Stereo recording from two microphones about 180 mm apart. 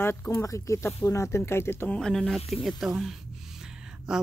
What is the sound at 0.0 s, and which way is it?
Speech, 15° left (ahead or behind).